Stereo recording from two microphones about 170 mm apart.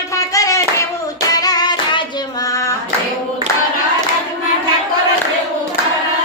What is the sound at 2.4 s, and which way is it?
Child singing, 20° left (ahead or behind).